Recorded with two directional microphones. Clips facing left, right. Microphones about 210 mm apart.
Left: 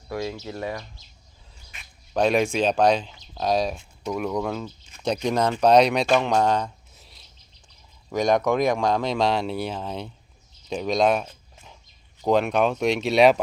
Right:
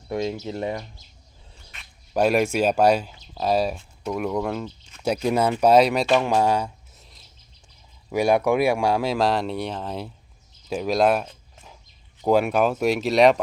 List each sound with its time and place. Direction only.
0.1 s speech: 20° right (ahead or behind)
2.1 s speech: 5° right (ahead or behind)
10.7 s a sound: 5° right (ahead or behind)
12.2 s speech: 5° right (ahead or behind)